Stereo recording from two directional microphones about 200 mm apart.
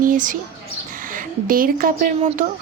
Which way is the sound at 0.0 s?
40° right (ahead or behind).